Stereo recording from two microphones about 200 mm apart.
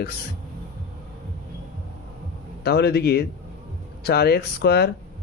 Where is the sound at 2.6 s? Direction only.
55° left (ahead or behind).